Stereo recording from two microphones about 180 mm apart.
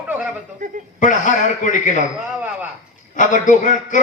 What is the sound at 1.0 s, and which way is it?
Speech, 45° left (ahead or behind).